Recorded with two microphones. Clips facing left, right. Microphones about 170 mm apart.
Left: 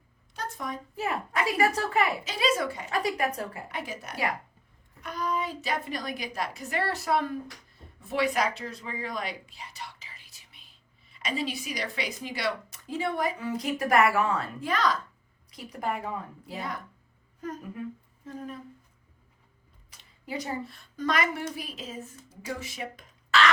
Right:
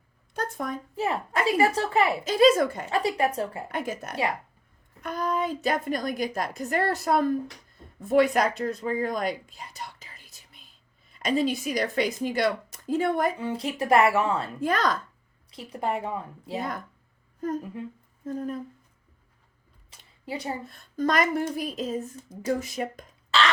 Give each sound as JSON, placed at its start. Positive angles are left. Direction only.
{"t": 0.3, "sound": "speech", "side_deg": -50}
{"t": 0.9, "sound": "speech", "side_deg": -30}
{"t": 2.2, "sound": "speech", "side_deg": -45}
{"t": 2.9, "sound": "speech", "side_deg": -30}
{"t": 3.7, "sound": "speech", "side_deg": -45}
{"t": 13.4, "sound": "speech", "side_deg": -30}
{"t": 14.6, "sound": "speech", "side_deg": -50}
{"t": 15.4, "sound": "speech", "side_deg": -25}
{"t": 18.3, "sound": "speech", "side_deg": -45}
{"t": 19.9, "sound": "a sound", "side_deg": -30}
{"t": 20.7, "sound": "speech", "side_deg": -45}
{"t": 23.3, "sound": "speech", "side_deg": -30}